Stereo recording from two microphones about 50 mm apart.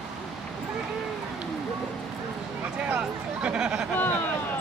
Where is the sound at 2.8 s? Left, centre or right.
Right.